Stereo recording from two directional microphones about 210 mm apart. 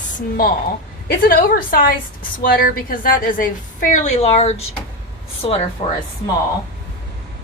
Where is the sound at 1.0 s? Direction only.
45° left (ahead or behind); by 5.6 s 25° left (ahead or behind).